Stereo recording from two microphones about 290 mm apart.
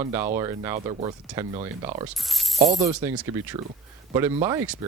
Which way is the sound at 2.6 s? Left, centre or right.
Right.